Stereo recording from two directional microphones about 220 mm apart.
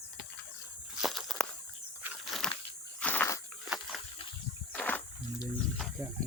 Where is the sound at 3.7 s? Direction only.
Centre (ahead or behind).